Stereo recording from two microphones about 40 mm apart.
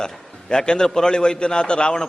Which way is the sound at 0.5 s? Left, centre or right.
Centre.